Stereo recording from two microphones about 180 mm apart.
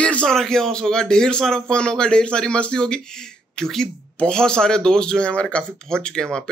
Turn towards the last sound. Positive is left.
turn(degrees=5)  # may be behind; listen again after turning